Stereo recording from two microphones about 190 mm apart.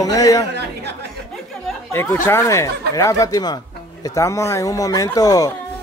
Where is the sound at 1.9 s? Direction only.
10° left (ahead or behind).